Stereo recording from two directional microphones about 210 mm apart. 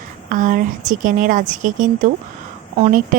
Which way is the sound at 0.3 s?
40° right (ahead or behind).